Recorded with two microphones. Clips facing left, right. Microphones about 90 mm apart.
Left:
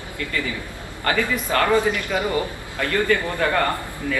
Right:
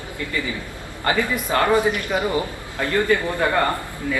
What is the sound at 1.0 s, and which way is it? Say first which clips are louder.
A man's voice: right 1 dB; 20° right (ahead or behind).